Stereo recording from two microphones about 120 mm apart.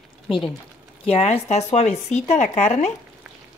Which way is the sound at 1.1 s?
60° left (ahead or behind).